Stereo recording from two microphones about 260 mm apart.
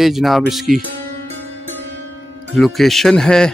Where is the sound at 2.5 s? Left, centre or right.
Centre.